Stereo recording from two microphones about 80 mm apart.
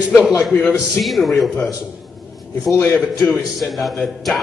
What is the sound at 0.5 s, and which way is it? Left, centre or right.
Speech, centre.